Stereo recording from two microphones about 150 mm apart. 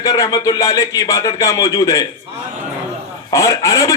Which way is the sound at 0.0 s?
25° left (ahead or behind).